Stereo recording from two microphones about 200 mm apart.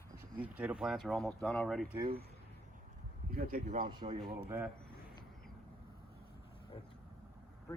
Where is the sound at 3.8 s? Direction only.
20° right (ahead or behind).